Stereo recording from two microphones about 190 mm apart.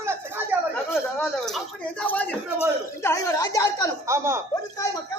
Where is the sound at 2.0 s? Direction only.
10° left (ahead or behind).